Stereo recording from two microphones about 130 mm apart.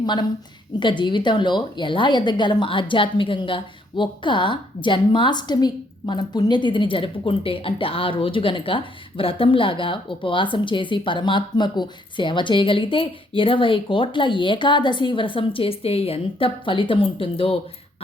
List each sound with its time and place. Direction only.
0.0 s a woman's voice: 35° left (ahead or behind)